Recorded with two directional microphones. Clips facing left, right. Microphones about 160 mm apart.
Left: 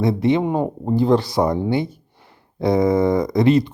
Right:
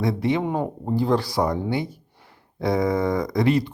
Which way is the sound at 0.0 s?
25° left (ahead or behind).